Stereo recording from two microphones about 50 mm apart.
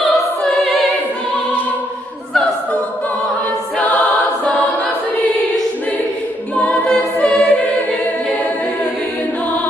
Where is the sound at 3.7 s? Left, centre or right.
Left.